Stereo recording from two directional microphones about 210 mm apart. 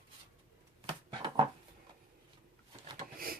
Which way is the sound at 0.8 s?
25° right (ahead or behind).